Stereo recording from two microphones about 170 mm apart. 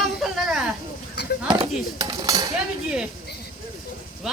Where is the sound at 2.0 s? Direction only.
20° right (ahead or behind).